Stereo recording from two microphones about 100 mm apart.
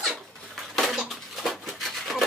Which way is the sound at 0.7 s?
Centre (ahead or behind).